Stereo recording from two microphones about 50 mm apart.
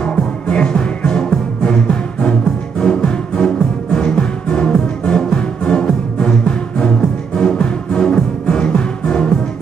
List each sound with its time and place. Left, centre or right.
0.0 s music: left